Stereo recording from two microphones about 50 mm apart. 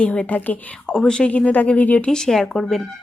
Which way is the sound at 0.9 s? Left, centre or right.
Centre.